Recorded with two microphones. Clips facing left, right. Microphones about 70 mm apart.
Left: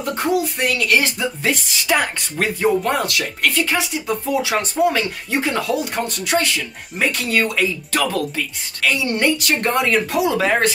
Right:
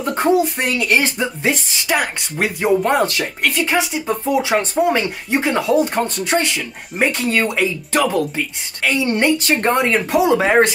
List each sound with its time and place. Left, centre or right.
0.1 s speech: right
2.0 s speech: centre
2.8 s speech: right